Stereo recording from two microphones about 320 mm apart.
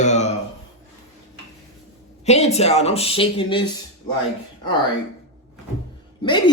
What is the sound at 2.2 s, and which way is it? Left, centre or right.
Speech, left.